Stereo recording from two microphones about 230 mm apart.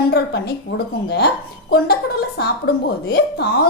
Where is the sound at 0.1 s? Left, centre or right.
Left.